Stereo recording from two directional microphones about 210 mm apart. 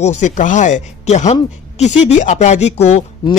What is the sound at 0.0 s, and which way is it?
Speech, 35° left (ahead or behind).